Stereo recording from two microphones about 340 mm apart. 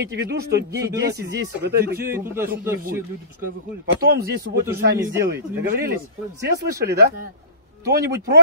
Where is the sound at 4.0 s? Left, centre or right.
Right.